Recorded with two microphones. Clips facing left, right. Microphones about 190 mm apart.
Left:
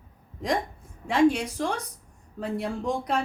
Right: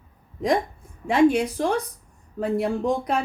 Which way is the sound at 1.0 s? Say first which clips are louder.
Right 3 dB; 60° right (ahead or behind).